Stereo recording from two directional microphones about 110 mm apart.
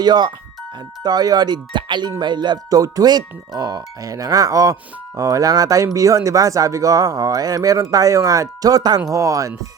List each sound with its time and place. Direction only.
0.0 s speech: 40° right (ahead or behind)